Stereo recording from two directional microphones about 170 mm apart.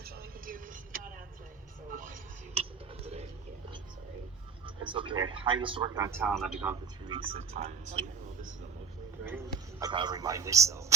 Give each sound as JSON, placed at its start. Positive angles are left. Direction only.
{"t": 0.0, "sound": "a sound", "side_deg": -60}
{"t": 1.9, "sound": "music", "side_deg": -55}
{"t": 2.6, "sound": "a sound", "side_deg": -40}
{"t": 4.6, "sound": "a man's voice", "side_deg": -30}
{"t": 6.2, "sound": "a man's voice", "side_deg": -5}
{"t": 7.1, "sound": "speech", "side_deg": -35}
{"t": 9.8, "sound": "a man's voice", "side_deg": -25}